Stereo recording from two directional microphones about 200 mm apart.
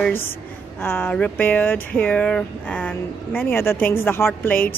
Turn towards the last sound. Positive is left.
turn(degrees=10)  # may be behind; listen again after turning